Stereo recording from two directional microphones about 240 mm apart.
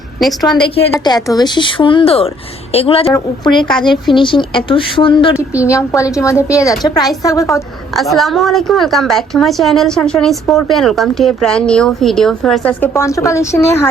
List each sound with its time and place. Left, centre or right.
0.9 s a woman's voice: centre
7.9 s a woman's voice: centre